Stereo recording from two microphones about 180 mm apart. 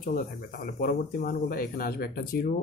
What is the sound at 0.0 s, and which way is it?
Speech, 55° left (ahead or behind).